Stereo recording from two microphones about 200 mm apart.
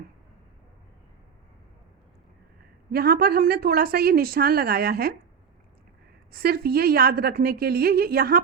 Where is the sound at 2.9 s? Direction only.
50° right (ahead or behind).